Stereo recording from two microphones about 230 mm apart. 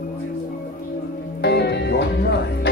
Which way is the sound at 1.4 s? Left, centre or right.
Left.